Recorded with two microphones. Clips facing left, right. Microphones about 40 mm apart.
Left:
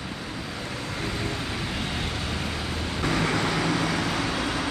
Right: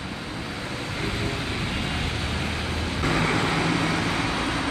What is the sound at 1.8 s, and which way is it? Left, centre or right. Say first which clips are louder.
Vehicle: right 2 dB; right.